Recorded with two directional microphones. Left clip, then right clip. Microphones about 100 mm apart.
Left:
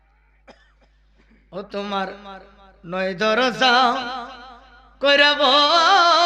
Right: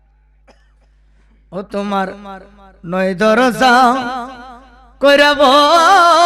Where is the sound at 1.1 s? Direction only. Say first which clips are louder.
Right 7 dB; 50° right (ahead or behind).